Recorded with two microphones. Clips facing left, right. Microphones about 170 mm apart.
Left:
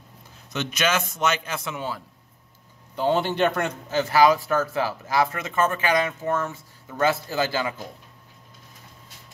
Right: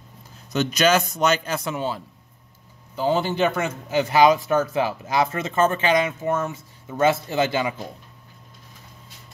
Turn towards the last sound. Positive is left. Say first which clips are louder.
# right 3 dB
turn(degrees=-20)  # may be behind; listen again after turning